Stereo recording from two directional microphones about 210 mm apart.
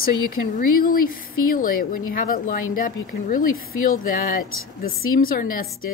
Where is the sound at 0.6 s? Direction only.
45° left (ahead or behind).